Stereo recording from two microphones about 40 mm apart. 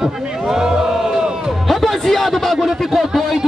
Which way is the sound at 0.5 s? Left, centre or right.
Centre.